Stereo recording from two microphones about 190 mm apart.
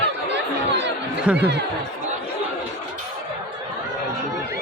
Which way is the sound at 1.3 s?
10° right (ahead or behind).